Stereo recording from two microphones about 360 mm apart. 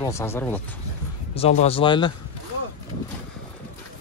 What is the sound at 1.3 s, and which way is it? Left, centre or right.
Speech, centre.